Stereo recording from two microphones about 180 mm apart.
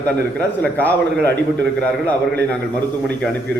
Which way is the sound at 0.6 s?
10° left (ahead or behind).